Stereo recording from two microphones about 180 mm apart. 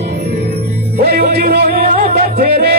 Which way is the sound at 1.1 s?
60° right (ahead or behind).